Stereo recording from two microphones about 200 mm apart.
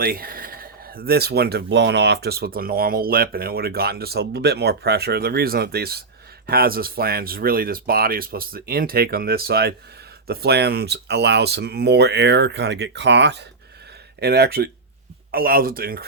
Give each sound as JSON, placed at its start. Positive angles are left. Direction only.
{"t": 0.0, "sound": "speech", "side_deg": -50}